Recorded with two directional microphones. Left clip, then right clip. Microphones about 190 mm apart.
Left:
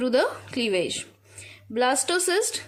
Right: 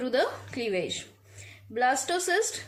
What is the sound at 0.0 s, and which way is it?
A woman's voice, 40° left (ahead or behind).